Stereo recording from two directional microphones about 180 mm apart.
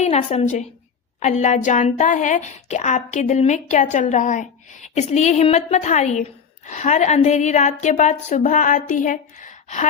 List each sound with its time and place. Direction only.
0.0 s a woman's voice: 40° left (ahead or behind)